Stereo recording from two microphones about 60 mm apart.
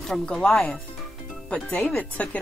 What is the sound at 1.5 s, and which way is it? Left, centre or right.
Speech, left.